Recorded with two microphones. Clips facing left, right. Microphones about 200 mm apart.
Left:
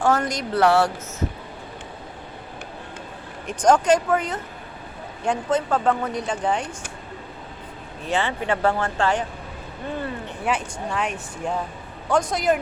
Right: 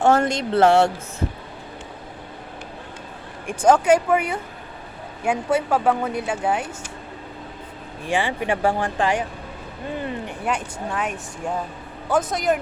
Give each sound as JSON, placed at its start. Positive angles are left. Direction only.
{"t": 0.0, "sound": "speech", "side_deg": -25}
{"t": 3.4, "sound": "speech", "side_deg": -10}
{"t": 8.0, "sound": "speech", "side_deg": -15}
{"t": 10.4, "sound": "speech", "side_deg": 0}